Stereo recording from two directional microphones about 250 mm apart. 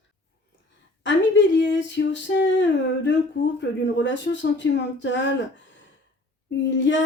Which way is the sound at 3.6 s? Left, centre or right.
Left.